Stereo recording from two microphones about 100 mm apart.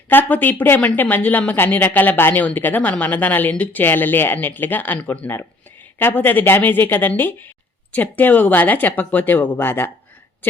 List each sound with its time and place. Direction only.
0.1 s speech: 20° left (ahead or behind)